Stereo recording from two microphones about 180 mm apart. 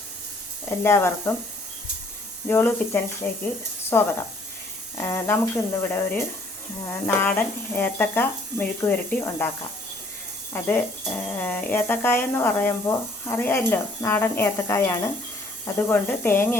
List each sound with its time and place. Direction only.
0.9 s speech: 15° left (ahead or behind)
2.5 s speech: 15° left (ahead or behind)
10.5 s speech: 10° left (ahead or behind)